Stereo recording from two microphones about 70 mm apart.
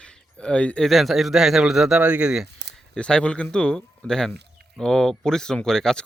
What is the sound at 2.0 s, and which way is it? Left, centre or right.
Speech, centre.